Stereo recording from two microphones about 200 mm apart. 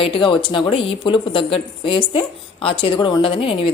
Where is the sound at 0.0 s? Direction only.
25° left (ahead or behind).